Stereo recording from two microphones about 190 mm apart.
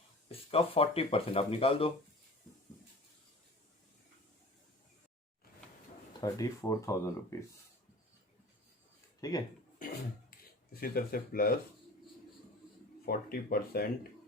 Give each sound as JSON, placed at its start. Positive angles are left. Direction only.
{"t": 0.3, "sound": "speech", "side_deg": 30}
{"t": 6.1, "sound": "speech", "side_deg": 20}
{"t": 9.2, "sound": "speech", "side_deg": 20}
{"t": 9.8, "sound": "a sound", "side_deg": 45}
{"t": 10.7, "sound": "speech", "side_deg": 50}
{"t": 13.1, "sound": "speech", "side_deg": 50}